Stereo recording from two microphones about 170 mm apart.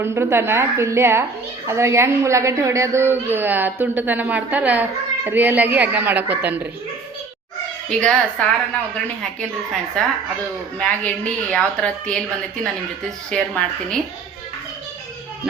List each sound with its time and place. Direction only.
0.0 s a child's voice: 15° right (ahead or behind)
7.9 s a woman's voice: 5° left (ahead or behind)
10.8 s a woman's voice: 5° left (ahead or behind)
13.3 s a woman's voice: 5° left (ahead or behind)